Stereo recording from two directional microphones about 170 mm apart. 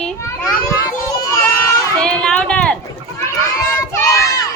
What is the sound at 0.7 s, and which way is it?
A child's voice, 20° left (ahead or behind).